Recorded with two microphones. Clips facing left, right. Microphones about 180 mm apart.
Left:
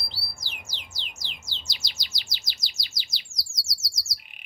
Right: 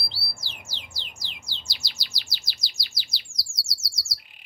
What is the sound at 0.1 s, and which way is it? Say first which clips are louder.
Music: right 1 dB; 15° left (ahead or behind).